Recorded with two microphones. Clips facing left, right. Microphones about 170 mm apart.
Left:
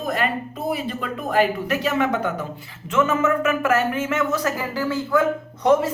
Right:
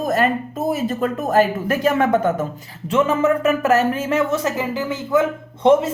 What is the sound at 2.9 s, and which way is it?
Speech, 35° right (ahead or behind).